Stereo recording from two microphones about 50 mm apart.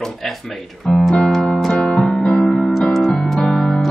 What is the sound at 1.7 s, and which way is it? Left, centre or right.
Music, centre.